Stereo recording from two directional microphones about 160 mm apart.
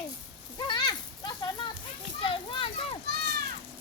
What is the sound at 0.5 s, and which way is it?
Speech, 25° left (ahead or behind).